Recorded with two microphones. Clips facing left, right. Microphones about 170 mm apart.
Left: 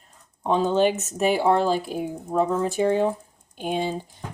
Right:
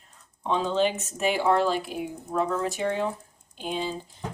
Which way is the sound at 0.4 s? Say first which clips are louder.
Left 4 dB; 45° left (ahead or behind).